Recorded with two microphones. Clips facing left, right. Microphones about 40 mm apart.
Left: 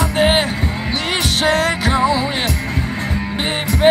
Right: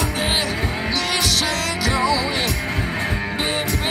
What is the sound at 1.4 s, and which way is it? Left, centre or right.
Music, left.